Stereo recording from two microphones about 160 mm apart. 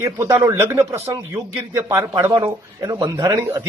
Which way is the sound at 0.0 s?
20° right (ahead or behind).